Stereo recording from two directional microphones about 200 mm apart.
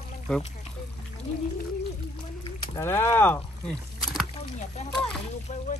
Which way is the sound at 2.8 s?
15° left (ahead or behind).